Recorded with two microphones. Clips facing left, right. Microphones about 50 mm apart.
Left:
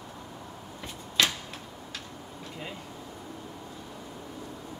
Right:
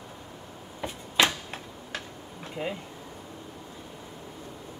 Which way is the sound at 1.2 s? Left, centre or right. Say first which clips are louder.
Right 3 dB; centre.